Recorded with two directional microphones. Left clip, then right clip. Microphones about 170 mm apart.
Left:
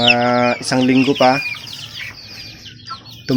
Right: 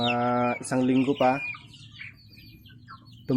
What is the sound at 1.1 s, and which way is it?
Speech, 15° left (ahead or behind).